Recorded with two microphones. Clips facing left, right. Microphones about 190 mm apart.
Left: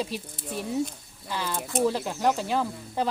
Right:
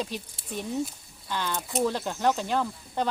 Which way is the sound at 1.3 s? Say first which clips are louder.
Even; 5° left (ahead or behind).